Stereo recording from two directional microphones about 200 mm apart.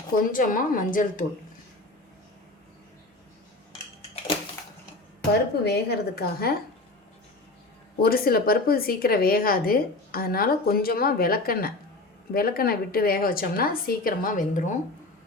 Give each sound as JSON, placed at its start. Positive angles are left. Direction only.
{"t": 0.2, "sound": "a woman's voice", "side_deg": 40}
{"t": 5.6, "sound": "a woman's voice", "side_deg": 55}
{"t": 7.9, "sound": "a woman's voice", "side_deg": 50}